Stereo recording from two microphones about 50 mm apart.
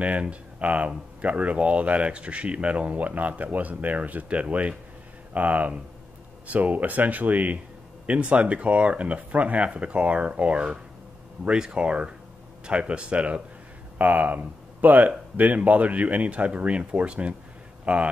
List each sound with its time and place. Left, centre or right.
0.0 s speech: right
13.9 s speech: right